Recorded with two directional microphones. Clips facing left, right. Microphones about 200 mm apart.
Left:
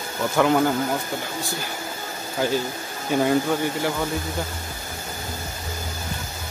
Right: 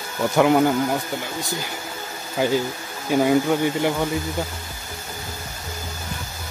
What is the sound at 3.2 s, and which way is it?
Speech, 15° right (ahead or behind).